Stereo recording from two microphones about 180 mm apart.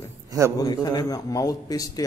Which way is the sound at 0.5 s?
20° left (ahead or behind).